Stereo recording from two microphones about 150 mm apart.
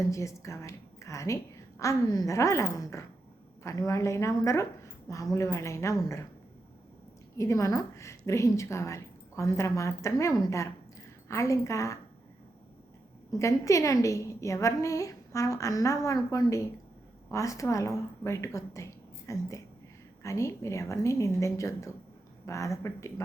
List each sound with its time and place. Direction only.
0.0 s a woman's voice: 20° left (ahead or behind)
7.3 s a woman's voice: 20° left (ahead or behind)
13.3 s a woman's voice: 20° left (ahead or behind)